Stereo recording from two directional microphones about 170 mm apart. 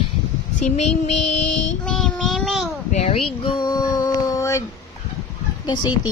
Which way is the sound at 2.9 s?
40° left (ahead or behind).